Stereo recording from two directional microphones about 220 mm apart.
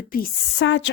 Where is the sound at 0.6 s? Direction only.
55° left (ahead or behind).